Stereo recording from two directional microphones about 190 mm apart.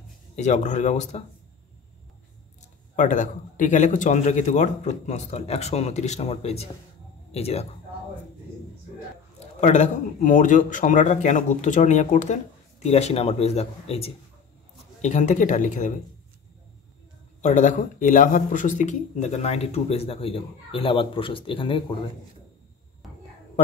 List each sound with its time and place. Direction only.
0.4 s speech: 40° left (ahead or behind)
3.0 s speech: 40° left (ahead or behind)
9.6 s speech: 40° left (ahead or behind)
17.4 s speech: 40° left (ahead or behind)
23.0 s whispering: centre (ahead or behind)